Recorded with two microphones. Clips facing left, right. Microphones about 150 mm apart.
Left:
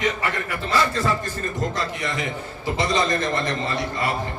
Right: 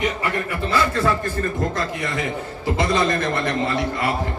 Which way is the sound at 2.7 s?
55° right (ahead or behind).